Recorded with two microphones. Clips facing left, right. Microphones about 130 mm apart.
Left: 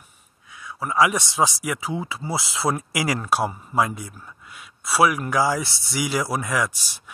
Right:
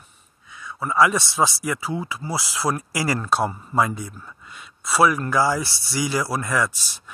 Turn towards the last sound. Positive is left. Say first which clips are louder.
# right 1 dB
turn(degrees=15)  # may be behind; listen again after turning